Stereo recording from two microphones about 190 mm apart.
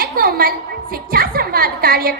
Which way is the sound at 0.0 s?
50° right (ahead or behind).